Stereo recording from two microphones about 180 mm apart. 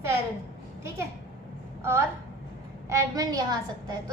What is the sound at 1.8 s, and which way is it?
A woman's voice, 15° right (ahead or behind).